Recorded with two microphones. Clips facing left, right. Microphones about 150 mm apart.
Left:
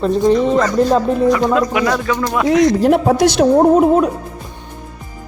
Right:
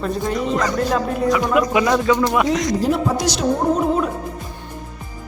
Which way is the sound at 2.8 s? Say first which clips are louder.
Left 7 dB; 65° left (ahead or behind).